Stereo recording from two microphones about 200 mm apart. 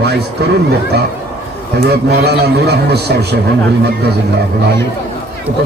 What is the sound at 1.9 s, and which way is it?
A man's voice, 55° right (ahead or behind).